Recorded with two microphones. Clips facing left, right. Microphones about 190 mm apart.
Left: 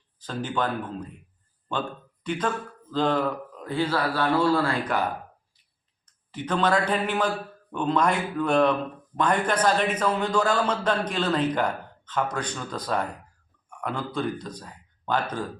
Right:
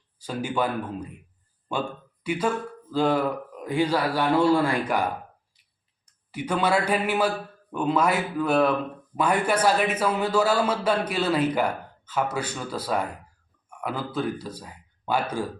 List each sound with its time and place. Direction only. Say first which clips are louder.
0.2 s a man's voice: right 2 dB; 10° right (ahead or behind)
6.3 s a man's voice: even; 10° right (ahead or behind)